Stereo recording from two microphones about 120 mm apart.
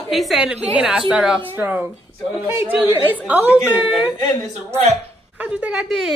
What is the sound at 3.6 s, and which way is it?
Speech, 5° right (ahead or behind).